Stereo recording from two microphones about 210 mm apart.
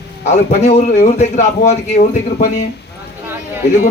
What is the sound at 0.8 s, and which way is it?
A man's voice, 40° left (ahead or behind).